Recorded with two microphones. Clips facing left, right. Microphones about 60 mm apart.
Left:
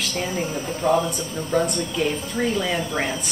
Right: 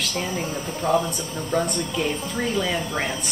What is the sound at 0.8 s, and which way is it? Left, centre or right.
Speech, left.